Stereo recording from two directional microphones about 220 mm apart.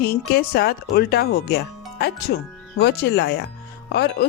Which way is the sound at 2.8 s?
50° left (ahead or behind).